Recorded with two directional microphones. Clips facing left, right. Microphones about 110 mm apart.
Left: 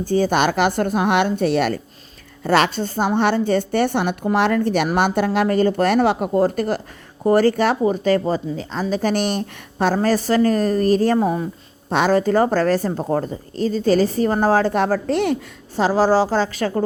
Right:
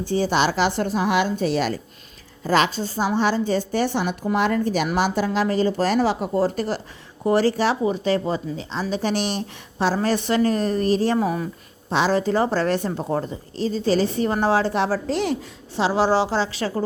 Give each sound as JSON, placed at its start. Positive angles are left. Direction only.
{"t": 0.0, "sound": "a woman's voice", "side_deg": 45}
{"t": 11.2, "sound": "speech", "side_deg": 30}
{"t": 11.9, "sound": "speech", "side_deg": 50}